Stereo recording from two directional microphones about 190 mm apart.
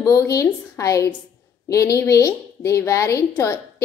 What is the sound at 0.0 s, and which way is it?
A woman's voice, 15° left (ahead or behind).